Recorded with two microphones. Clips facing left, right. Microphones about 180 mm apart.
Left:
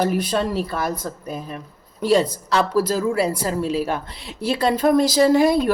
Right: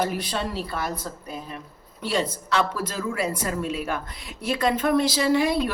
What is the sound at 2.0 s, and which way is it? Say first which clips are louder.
Speech: left 8 dB; 40° left (ahead or behind).